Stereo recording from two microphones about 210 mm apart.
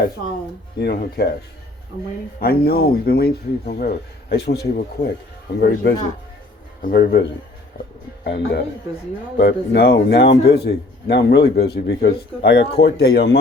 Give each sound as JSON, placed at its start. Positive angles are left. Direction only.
{"t": 0.8, "sound": "speech", "side_deg": 50}
{"t": 2.4, "sound": "speech", "side_deg": 45}